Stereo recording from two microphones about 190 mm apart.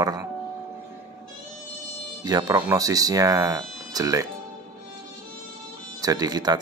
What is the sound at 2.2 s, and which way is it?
Speech, 20° right (ahead or behind).